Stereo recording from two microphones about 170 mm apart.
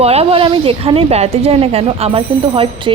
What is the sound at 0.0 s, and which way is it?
A woman's voice, 35° right (ahead or behind).